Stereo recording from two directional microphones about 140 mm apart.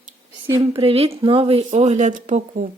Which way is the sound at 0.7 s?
45° right (ahead or behind).